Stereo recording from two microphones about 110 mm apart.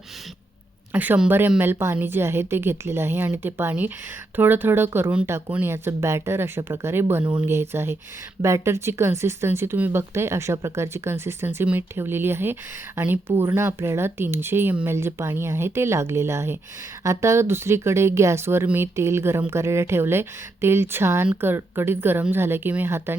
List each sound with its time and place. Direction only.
0.9 s speech: 15° right (ahead or behind)